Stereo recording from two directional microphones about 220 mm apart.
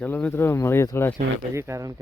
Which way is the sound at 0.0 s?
5° left (ahead or behind).